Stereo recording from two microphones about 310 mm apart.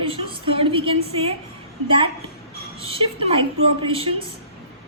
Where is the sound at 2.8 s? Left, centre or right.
Centre.